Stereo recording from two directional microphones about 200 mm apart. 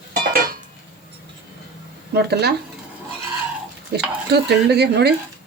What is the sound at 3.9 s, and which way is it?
Speech, 55° right (ahead or behind).